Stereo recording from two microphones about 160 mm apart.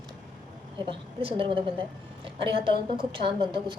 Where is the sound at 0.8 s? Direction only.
35° right (ahead or behind).